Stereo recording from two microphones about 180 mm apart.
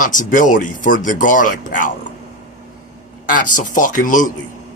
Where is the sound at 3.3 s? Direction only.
45° left (ahead or behind).